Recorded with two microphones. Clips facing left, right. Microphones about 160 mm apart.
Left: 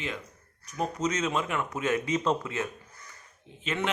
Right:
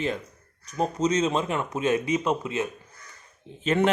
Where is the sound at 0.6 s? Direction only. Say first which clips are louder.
Right 5 dB; 25° right (ahead or behind).